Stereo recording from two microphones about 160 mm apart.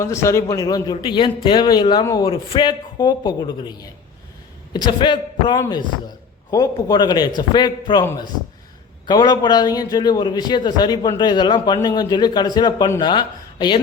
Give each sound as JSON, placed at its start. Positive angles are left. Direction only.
{"t": 0.0, "sound": "a man's voice", "side_deg": 15}
{"t": 9.0, "sound": "a man's voice", "side_deg": 25}